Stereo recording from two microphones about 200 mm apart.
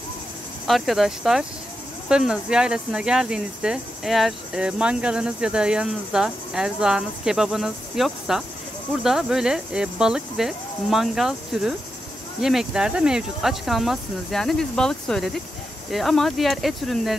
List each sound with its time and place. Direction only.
0.7 s speech: centre (ahead or behind)